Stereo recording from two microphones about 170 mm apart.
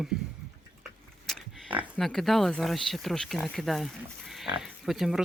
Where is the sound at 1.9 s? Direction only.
Centre (ahead or behind).